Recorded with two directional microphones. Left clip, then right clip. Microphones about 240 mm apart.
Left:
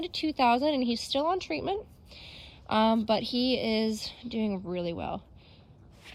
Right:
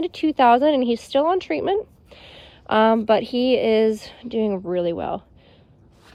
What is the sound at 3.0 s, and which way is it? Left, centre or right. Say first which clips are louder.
A woman's voice: right 9 dB; centre.